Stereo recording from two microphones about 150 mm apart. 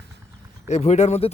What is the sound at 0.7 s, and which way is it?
Speech, 45° left (ahead or behind).